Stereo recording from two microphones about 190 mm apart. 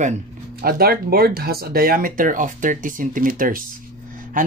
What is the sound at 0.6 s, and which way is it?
Speech, 50° right (ahead or behind).